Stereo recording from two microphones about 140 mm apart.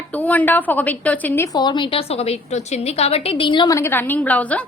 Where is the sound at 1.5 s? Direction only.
30° left (ahead or behind).